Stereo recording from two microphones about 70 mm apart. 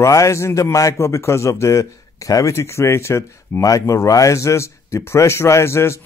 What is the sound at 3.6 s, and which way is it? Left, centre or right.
Speech, left.